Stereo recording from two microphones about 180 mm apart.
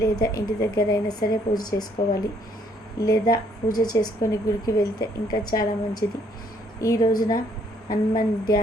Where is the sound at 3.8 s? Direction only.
20° left (ahead or behind).